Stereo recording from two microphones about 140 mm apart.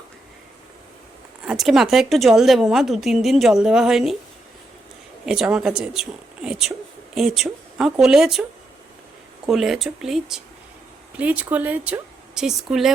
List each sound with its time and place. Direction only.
1.5 s a woman's voice: centre (ahead or behind)
5.2 s a woman's voice: 5° right (ahead or behind)
9.5 s a woman's voice: centre (ahead or behind)